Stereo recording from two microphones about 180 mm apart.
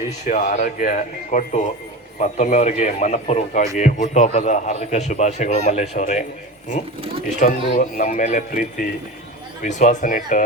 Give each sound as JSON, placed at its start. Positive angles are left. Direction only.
{"t": 0.3, "sound": "a man's voice", "side_deg": 40}
{"t": 7.4, "sound": "speech", "side_deg": 45}